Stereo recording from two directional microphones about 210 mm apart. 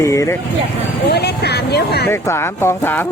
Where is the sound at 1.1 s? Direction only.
50° left (ahead or behind).